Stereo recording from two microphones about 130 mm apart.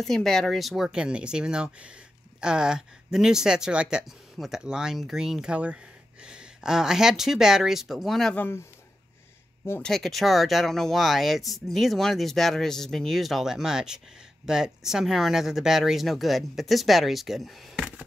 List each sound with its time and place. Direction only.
0.0 s speech: 5° left (ahead or behind)
8.4 s speech: 20° left (ahead or behind)
9.8 s speech: 5° left (ahead or behind)
17.7 s a sound: 10° right (ahead or behind)